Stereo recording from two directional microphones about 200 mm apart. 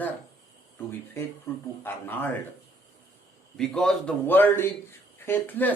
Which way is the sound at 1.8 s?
10° left (ahead or behind).